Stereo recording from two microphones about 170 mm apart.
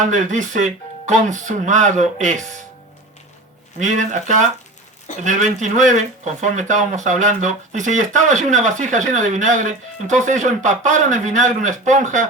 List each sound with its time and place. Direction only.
0.1 s speech: 45° right (ahead or behind)
3.8 s speech: 45° right (ahead or behind)